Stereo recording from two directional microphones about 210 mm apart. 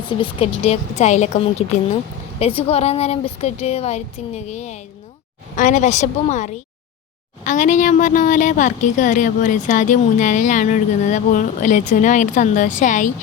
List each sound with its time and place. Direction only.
0.1 s a woman's voice: 25° left (ahead or behind)